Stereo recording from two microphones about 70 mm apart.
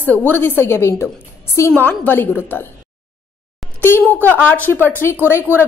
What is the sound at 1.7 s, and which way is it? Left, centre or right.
Speech, left.